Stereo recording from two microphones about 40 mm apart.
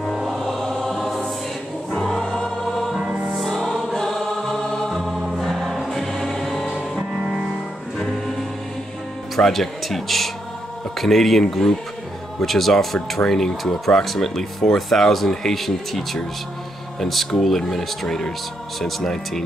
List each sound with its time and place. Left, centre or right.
0.4 s music: centre
0.8 s choir: centre
3.0 s music: right
3.3 s music: centre
3.9 s choir: centre
5.4 s music: centre
9.4 s speech: centre
17.3 s speech: centre
18.8 s speech: centre